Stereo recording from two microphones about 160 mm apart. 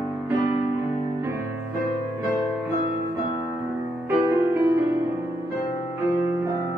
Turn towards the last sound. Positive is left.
turn(degrees=-15)  # may be behind; listen again after turning